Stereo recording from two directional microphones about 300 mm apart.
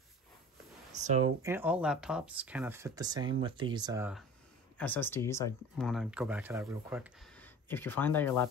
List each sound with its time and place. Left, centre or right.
1.0 s speech: right
1.4 s speech: centre
4.7 s speech: centre
7.3 s speech: centre